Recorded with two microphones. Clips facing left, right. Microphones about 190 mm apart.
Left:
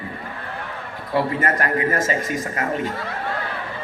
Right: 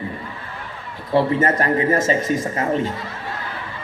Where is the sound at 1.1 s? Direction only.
25° right (ahead or behind).